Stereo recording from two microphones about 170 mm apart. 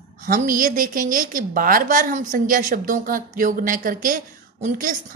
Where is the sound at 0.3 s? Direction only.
55° right (ahead or behind).